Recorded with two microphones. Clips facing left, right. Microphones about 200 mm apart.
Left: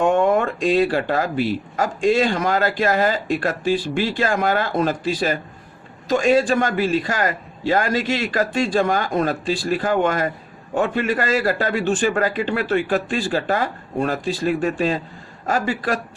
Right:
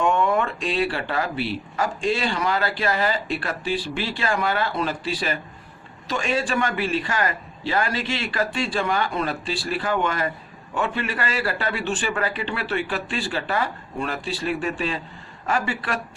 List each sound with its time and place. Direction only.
0.0 s a man's voice: 45° left (ahead or behind)